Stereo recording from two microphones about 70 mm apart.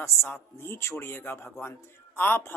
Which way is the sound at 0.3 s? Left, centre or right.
Left.